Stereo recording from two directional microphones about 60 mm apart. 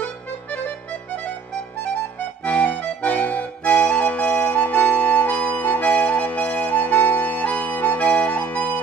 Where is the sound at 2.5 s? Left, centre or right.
Left.